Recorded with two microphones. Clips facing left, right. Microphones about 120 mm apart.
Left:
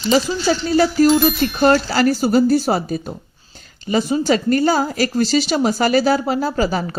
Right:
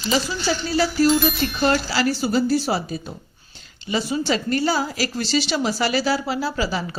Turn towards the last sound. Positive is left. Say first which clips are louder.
# left 5 dB
turn(degrees=45)  # may be behind; listen again after turning